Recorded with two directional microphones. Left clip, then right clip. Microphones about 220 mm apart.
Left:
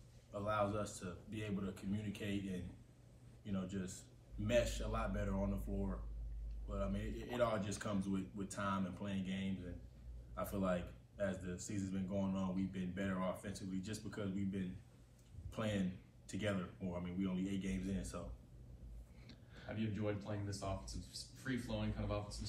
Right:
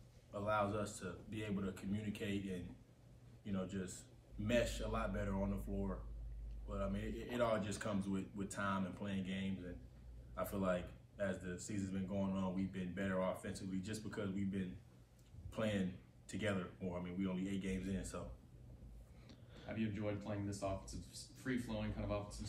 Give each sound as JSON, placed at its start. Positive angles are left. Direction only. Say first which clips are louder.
{"t": 0.3, "sound": "a man's voice", "louder": "even", "side_deg": -5}
{"t": 3.4, "sound": "a man's voice", "louder": "right 1 dB", "side_deg": 0}
{"t": 6.7, "sound": "a man's voice", "louder": "even", "side_deg": 0}
{"t": 19.2, "sound": "a sound", "louder": "even", "side_deg": -15}
{"t": 19.9, "sound": "speech", "louder": "left 1 dB", "side_deg": -30}